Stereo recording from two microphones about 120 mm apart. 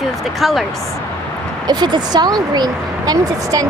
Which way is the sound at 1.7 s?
35° right (ahead or behind).